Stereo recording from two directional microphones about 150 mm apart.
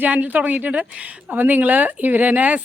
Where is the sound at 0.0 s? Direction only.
10° right (ahead or behind).